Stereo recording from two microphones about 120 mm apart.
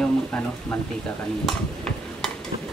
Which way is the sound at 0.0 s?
20° left (ahead or behind).